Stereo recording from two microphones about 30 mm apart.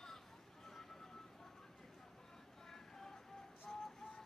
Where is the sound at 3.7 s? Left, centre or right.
Centre.